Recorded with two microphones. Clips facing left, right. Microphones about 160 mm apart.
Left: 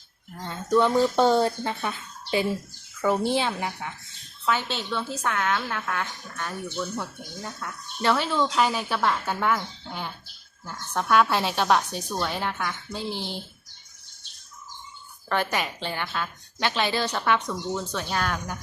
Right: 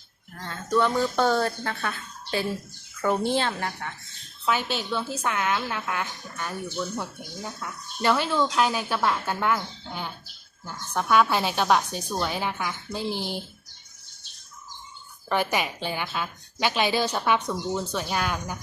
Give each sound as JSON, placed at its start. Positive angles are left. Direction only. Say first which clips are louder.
{"t": 0.3, "sound": "a woman's voice", "louder": "left 2 dB", "side_deg": 15}
{"t": 4.4, "sound": "a woman's voice", "louder": "right 1 dB", "side_deg": -10}
{"t": 15.3, "sound": "a woman's voice", "louder": "right 1 dB", "side_deg": -10}